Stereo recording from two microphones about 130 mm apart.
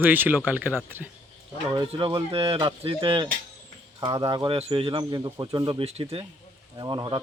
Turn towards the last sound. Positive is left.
turn(degrees=-30)  # may be behind; listen again after turning